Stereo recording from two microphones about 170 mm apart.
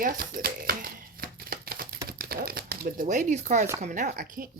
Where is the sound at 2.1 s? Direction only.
60° right (ahead or behind); by 3.7 s 45° right (ahead or behind).